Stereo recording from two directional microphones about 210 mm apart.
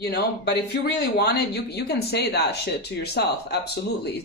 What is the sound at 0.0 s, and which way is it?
Speech, 50° left (ahead or behind).